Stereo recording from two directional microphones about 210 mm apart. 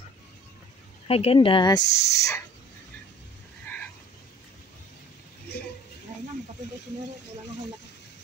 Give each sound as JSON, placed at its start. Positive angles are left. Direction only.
{"t": 1.0, "sound": "speech", "side_deg": 25}